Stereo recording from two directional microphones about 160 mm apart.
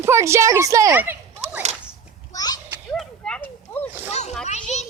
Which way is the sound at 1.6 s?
45° right (ahead or behind).